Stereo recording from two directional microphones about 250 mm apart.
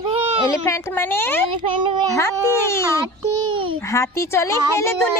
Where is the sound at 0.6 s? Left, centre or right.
Centre.